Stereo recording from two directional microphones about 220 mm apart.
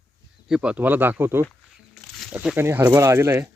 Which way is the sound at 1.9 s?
Centre (ahead or behind).